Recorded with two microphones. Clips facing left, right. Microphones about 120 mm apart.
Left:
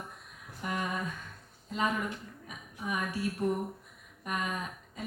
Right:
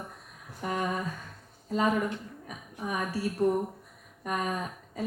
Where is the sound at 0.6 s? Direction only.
35° right (ahead or behind).